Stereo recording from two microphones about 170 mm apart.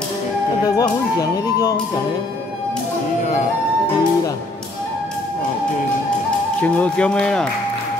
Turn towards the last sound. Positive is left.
turn(degrees=5)  # may be behind; listen again after turning